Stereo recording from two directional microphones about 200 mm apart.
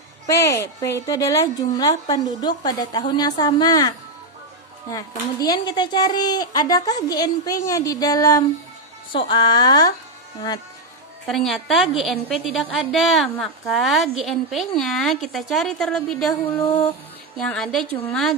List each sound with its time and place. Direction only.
0.3 s a woman's voice: 15° left (ahead or behind)
7.7 s a sound: 15° left (ahead or behind)
9.1 s a woman's voice: 25° left (ahead or behind)
11.3 s a woman's voice: centre (ahead or behind)
17.3 s a woman's voice: 5° left (ahead or behind)